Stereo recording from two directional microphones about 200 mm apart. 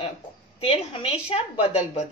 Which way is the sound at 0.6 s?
30° left (ahead or behind).